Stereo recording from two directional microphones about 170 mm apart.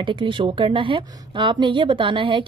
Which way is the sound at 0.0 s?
30° right (ahead or behind).